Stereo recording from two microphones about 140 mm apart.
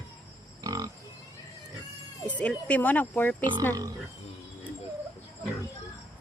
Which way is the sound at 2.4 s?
10° left (ahead or behind).